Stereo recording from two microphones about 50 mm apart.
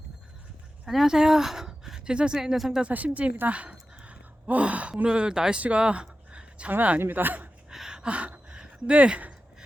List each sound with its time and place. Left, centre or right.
0.9 s speech: centre
2.4 s speech: centre
2.8 s speech: right
4.0 s gasp: right
5.0 s speech: centre
5.5 s a sound: right
6.7 s a man's voice: right
7.7 s a sound: centre